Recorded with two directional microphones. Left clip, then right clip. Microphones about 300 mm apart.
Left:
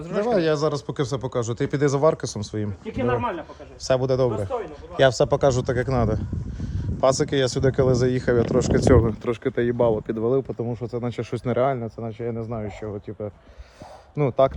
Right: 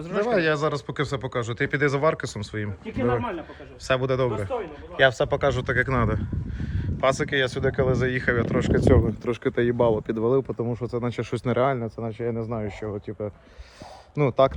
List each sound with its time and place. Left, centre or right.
0.0 s speech: centre
4.3 s a man's voice: left
4.9 s speech: centre
8.8 s a man's voice: left
9.2 s speech: centre